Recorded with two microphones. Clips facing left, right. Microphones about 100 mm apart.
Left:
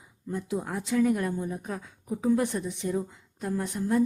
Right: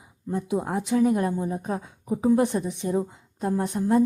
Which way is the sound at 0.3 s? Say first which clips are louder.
Right 5 dB; 20° right (ahead or behind).